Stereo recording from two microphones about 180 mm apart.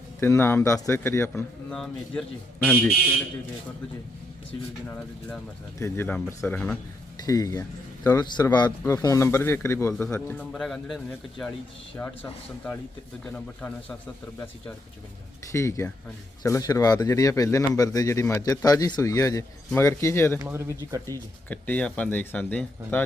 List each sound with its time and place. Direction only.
0.2 s speech: 15° left (ahead or behind)
1.7 s speech: 5° left (ahead or behind)
5.8 s speech: 10° left (ahead or behind)
7.3 s a man's voice: 20° left (ahead or behind)
15.5 s speech: 15° left (ahead or behind)
20.4 s speech: 15° right (ahead or behind)
21.5 s speech: 10° left (ahead or behind)